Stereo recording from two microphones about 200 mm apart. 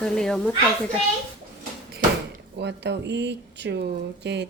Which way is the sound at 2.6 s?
60° right (ahead or behind).